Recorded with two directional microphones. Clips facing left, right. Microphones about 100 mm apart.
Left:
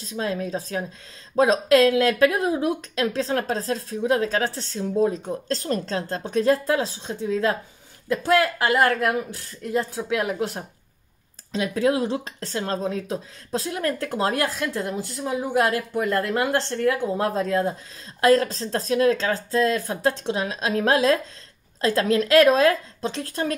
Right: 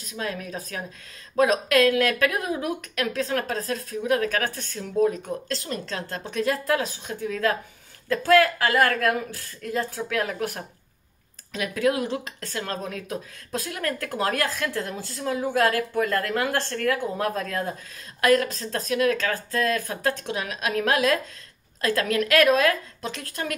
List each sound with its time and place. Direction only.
0.0 s speech: 30° left (ahead or behind)